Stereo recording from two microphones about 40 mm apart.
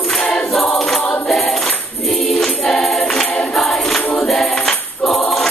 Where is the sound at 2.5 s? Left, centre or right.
Centre.